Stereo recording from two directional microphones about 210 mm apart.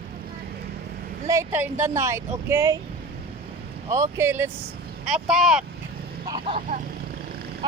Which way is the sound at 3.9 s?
15° right (ahead or behind).